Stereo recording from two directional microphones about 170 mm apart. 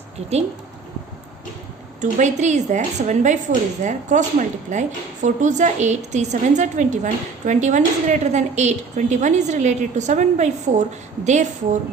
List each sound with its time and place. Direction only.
2.0 s a woman's voice: 45° right (ahead or behind)